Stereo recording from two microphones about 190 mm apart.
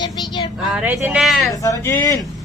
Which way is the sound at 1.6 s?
15° left (ahead or behind).